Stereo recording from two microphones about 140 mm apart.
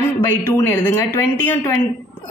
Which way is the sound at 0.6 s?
15° left (ahead or behind).